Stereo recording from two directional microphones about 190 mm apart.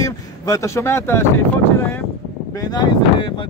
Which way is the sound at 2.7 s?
25° left (ahead or behind).